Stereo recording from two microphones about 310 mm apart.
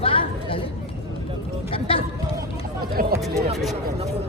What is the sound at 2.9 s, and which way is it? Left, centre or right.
Speech, right.